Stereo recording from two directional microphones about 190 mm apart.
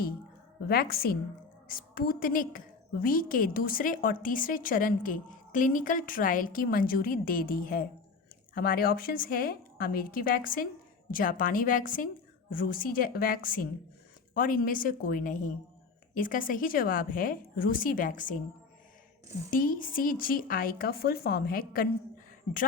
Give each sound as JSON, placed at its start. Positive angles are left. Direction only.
{"t": 0.7, "sound": "a woman's voice", "side_deg": 50}
{"t": 19.5, "sound": "a woman's voice", "side_deg": 45}